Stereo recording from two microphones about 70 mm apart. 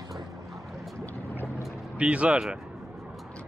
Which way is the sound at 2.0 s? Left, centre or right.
Centre.